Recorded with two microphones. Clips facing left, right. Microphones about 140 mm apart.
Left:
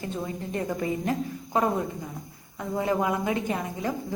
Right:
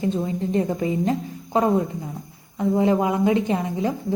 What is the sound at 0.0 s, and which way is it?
A woman's voice, 25° right (ahead or behind).